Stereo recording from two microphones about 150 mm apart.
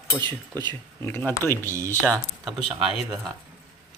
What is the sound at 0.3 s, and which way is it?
Speech, 15° left (ahead or behind).